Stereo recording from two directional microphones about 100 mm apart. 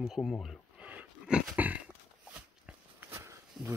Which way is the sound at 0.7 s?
10° right (ahead or behind).